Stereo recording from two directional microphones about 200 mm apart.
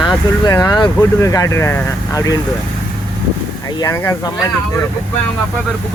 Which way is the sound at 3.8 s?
15° left (ahead or behind).